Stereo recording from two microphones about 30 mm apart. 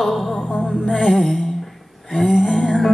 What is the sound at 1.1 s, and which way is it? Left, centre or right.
Music, centre.